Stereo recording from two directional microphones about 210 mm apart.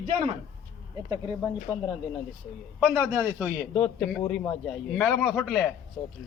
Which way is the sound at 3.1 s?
10° right (ahead or behind).